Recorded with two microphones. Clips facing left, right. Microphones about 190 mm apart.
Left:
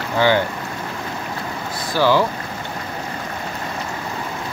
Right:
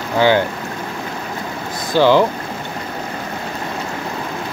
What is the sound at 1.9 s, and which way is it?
Speech, 20° right (ahead or behind).